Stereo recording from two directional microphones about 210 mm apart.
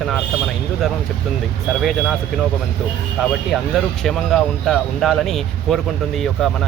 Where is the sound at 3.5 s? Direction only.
Centre (ahead or behind).